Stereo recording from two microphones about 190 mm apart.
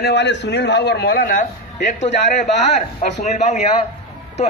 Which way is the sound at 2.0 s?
35° left (ahead or behind).